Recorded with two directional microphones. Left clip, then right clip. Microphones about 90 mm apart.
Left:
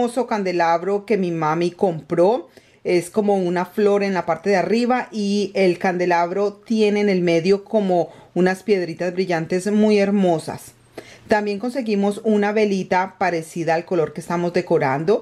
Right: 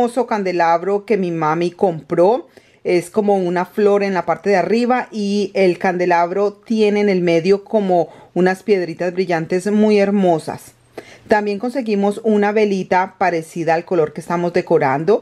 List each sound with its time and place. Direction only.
0.0 s a woman's voice: 20° right (ahead or behind)